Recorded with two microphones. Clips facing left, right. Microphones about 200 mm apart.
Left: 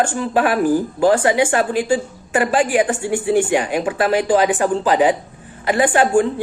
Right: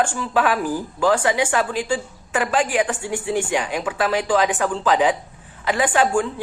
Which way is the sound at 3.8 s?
45° left (ahead or behind).